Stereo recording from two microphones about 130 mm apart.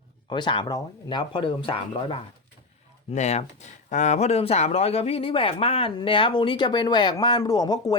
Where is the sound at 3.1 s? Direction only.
55° left (ahead or behind).